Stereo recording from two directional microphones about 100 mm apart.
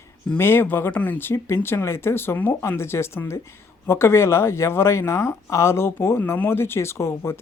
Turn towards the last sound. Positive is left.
turn(degrees=25)  # may be behind; listen again after turning